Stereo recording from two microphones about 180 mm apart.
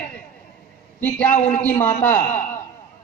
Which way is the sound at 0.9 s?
10° left (ahead or behind).